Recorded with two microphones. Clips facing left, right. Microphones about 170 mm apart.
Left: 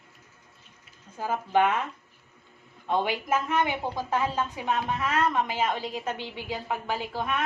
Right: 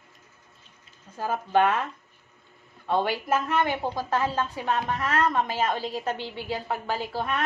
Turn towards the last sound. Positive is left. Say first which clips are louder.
# right 1 dB
turn(degrees=10)  # may be behind; listen again after turning